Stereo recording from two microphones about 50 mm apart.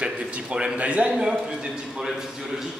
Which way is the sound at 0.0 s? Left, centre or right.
Right.